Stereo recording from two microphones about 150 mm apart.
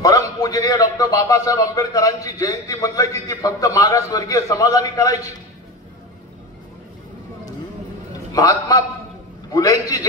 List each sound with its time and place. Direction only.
0.0 s a man's voice: 25° left (ahead or behind)
8.3 s a man's voice: 25° left (ahead or behind)